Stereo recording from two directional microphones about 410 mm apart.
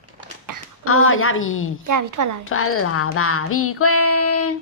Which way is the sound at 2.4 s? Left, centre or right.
Left.